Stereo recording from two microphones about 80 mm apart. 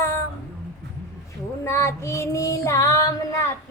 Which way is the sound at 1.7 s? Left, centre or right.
Left.